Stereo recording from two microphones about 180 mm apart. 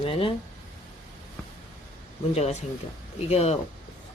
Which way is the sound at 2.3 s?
35° left (ahead or behind).